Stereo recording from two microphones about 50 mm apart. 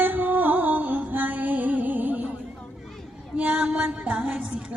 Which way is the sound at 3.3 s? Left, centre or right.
Right.